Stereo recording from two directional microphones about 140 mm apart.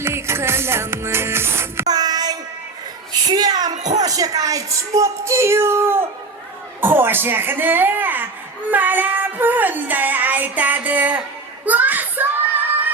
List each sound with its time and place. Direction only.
0.0 s music: 20° right (ahead or behind)
1.9 s child singing: 30° right (ahead or behind)
3.1 s a child's voice: 30° right (ahead or behind)
6.8 s music: 15° right (ahead or behind)
11.6 s children playing: 10° right (ahead or behind)